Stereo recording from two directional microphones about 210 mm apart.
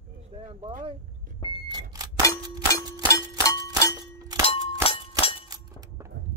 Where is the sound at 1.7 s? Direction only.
20° right (ahead or behind).